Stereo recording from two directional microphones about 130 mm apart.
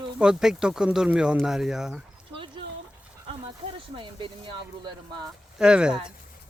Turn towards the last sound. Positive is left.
turn(degrees=-5)  # may be behind; listen again after turning